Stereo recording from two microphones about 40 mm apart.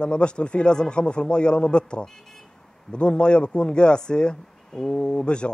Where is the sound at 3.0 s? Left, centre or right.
Left.